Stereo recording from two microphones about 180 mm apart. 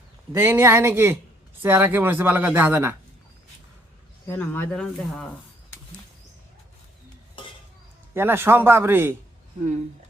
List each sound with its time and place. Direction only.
0.3 s speech: 15° right (ahead or behind)
4.3 s speech: 10° left (ahead or behind)
7.4 s dishes: 30° left (ahead or behind)
8.1 s speech: 15° right (ahead or behind)